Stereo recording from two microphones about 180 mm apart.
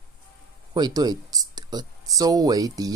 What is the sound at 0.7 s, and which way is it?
Speech, 20° right (ahead or behind).